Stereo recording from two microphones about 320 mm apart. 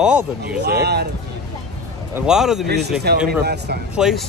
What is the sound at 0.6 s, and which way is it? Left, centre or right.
Speech, right.